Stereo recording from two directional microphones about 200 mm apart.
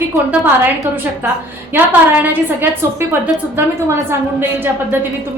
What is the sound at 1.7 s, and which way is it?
A woman's voice, 10° right (ahead or behind).